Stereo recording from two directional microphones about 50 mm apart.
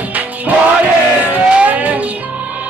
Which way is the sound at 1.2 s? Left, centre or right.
Right.